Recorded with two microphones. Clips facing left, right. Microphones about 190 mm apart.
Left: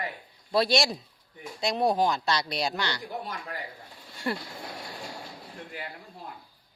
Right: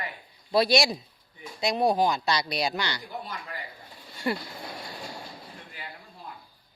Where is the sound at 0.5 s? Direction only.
5° right (ahead or behind).